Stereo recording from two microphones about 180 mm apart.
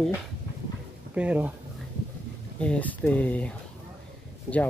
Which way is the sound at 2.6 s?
10° left (ahead or behind).